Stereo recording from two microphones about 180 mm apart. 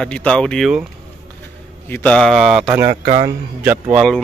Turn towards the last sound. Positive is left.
turn(degrees=-5)  # may be behind; listen again after turning